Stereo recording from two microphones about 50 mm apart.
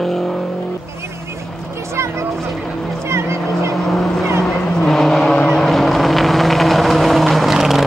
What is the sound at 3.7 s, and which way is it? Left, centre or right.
Vehicle, centre.